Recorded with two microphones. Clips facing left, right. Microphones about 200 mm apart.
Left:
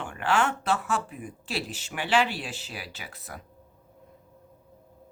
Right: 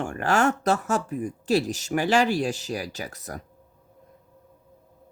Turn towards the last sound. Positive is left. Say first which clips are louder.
# right 7 dB
turn(degrees=-40)  # may be behind; listen again after turning